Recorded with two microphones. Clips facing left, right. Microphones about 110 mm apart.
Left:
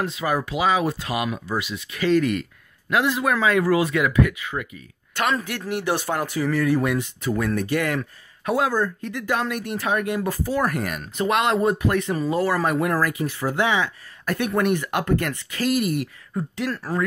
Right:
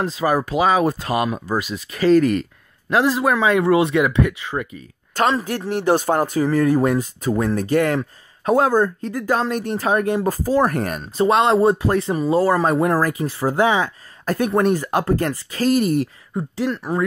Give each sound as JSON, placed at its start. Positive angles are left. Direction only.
{"t": 0.0, "sound": "speech", "side_deg": -35}
{"t": 9.1, "sound": "speech", "side_deg": -35}
{"t": 16.3, "sound": "speech", "side_deg": -25}